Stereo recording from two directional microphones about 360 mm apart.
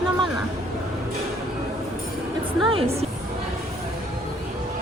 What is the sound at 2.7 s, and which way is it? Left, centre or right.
Speech, centre.